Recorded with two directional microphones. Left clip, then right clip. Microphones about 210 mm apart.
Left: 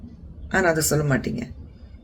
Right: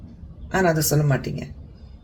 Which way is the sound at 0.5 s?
20° left (ahead or behind).